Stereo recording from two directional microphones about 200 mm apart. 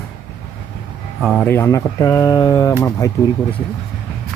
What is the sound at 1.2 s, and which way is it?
Speech, 5° left (ahead or behind).